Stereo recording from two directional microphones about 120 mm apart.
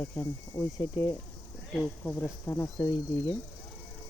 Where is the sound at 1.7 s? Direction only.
15° left (ahead or behind).